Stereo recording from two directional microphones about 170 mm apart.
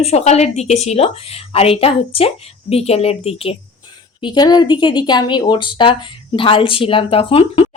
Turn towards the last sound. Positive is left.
turn(degrees=35)  # may be behind; listen again after turning